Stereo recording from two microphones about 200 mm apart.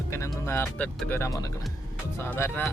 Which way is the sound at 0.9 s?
10° left (ahead or behind).